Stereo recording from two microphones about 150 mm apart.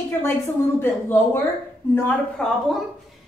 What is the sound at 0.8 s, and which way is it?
A woman's voice, 15° left (ahead or behind).